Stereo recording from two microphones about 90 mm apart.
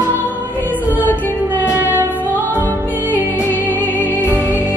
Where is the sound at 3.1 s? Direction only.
20° left (ahead or behind).